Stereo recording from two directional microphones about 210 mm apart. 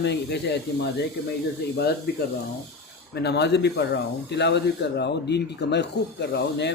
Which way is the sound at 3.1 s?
55° left (ahead or behind).